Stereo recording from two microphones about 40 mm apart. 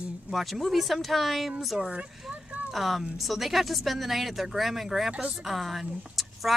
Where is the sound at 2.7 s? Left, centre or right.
Centre.